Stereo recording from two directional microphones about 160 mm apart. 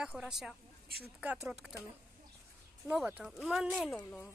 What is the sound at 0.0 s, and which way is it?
Speech, 5° right (ahead or behind).